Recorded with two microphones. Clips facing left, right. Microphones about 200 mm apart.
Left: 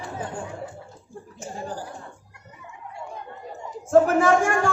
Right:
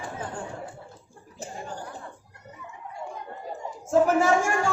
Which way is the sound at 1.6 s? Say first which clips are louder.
Left 5 dB; 35° left (ahead or behind).